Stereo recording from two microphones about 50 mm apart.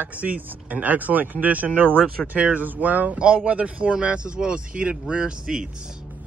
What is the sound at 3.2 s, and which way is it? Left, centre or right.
Speech, right.